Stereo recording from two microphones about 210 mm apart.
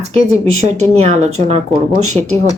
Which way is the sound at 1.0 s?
30° right (ahead or behind).